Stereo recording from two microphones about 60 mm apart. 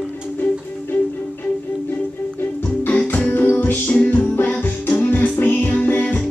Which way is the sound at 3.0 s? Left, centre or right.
Left.